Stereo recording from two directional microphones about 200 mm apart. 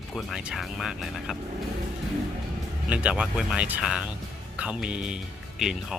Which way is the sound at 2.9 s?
5° right (ahead or behind).